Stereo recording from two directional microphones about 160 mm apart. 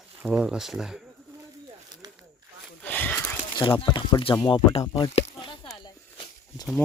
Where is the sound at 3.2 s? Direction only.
25° left (ahead or behind).